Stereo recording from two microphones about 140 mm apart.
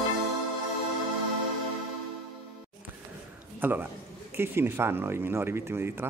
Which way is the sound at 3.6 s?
15° right (ahead or behind).